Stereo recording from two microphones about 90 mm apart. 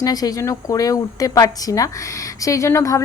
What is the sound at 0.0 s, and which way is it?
A woman's voice, 45° left (ahead or behind).